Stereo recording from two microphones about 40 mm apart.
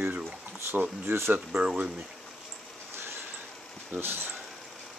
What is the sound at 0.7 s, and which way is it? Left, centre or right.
Speech, right.